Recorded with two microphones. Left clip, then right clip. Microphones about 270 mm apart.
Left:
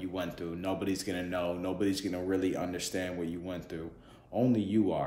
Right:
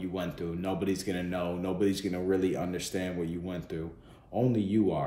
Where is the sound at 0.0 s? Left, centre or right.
Centre.